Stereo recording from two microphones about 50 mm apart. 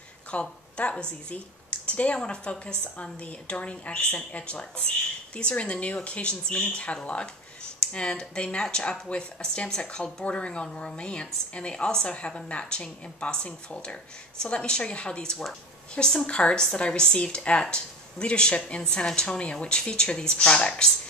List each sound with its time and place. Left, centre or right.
0.3 s speech: left
1.3 s a sound: left
2.1 s a woman's voice: left